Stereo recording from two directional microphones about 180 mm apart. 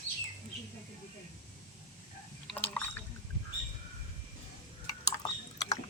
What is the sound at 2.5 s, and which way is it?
Drip, 10° left (ahead or behind).